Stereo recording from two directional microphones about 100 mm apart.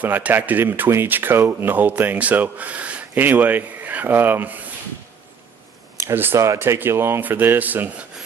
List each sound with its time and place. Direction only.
0.0 s speech: 15° right (ahead or behind)
6.0 s speech: 25° right (ahead or behind)